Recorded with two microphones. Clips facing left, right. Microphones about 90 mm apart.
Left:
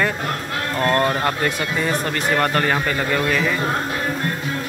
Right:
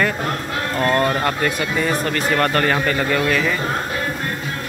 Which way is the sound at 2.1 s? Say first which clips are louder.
Right 1 dB; 15° left (ahead or behind).